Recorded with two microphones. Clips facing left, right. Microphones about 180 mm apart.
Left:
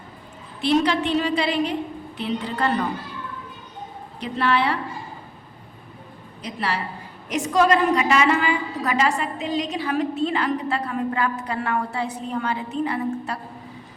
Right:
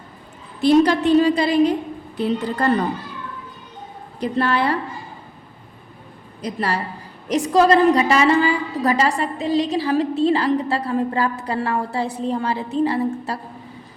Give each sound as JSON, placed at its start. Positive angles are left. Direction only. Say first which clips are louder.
{"t": 0.6, "sound": "a woman's voice", "louder": "right 6 dB", "side_deg": -40}
{"t": 4.2, "sound": "a woman's voice", "louder": "right 2 dB", "side_deg": -40}
{"t": 6.4, "sound": "a woman's voice", "louder": "right 4 dB", "side_deg": -40}